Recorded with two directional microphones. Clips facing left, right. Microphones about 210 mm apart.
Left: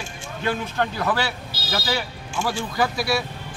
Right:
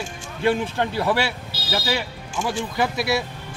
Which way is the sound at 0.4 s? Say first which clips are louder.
Right 4 dB; 30° right (ahead or behind).